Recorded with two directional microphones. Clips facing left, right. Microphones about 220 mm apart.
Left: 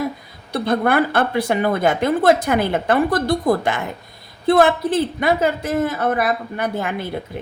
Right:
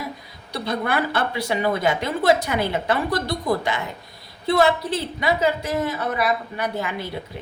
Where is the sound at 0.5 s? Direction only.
50° left (ahead or behind).